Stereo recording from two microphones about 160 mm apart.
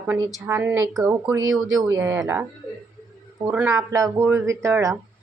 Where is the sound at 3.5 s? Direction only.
15° right (ahead or behind).